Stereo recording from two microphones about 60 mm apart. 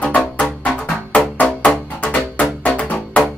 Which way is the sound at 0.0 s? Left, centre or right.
Left.